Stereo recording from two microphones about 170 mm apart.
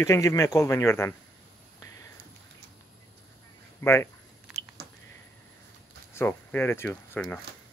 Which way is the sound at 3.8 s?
15° left (ahead or behind).